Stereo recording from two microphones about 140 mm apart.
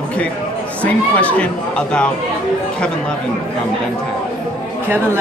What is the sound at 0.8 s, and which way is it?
Speech, 10° left (ahead or behind).